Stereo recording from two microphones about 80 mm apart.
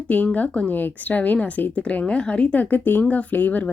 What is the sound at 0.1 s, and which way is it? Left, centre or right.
A woman's voice, centre.